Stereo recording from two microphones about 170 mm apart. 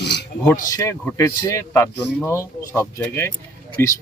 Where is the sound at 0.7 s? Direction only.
20° left (ahead or behind).